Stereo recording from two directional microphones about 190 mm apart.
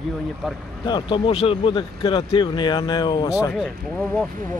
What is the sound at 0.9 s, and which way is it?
Speech, 30° left (ahead or behind).